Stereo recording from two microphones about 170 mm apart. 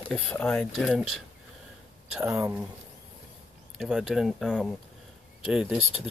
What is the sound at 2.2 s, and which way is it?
Speech, 15° right (ahead or behind).